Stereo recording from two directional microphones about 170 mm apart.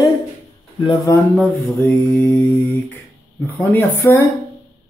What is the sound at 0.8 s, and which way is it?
Speech, 20° left (ahead or behind).